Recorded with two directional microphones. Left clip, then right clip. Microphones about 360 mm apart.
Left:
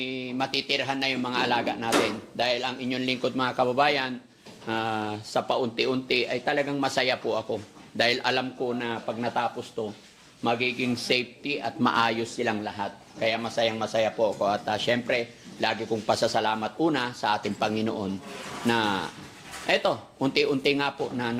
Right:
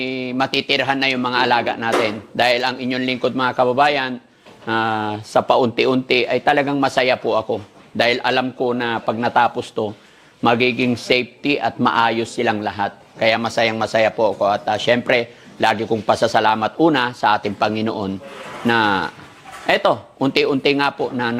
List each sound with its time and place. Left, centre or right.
0.0 s speech: right
8.6 s speech: right
10.9 s speech: centre
11.4 s speech: right
11.8 s speech: centre
12.4 s speech: right
14.3 s speech: centre
15.0 s speech: right